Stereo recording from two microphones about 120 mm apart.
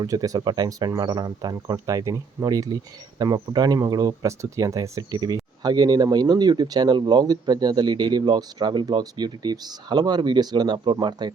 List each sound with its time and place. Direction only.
0.0 s speech: 30° right (ahead or behind)